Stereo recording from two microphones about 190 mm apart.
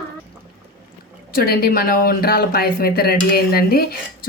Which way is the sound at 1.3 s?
50° left (ahead or behind).